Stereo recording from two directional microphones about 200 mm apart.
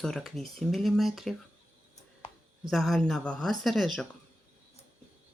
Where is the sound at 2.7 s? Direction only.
Centre (ahead or behind).